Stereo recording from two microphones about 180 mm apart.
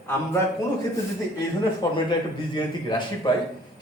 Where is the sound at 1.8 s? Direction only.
20° left (ahead or behind).